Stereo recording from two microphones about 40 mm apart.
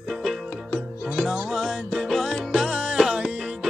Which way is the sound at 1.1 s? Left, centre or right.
Centre.